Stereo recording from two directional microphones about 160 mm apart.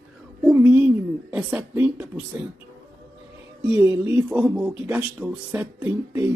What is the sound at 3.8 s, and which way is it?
Speech, 20° right (ahead or behind).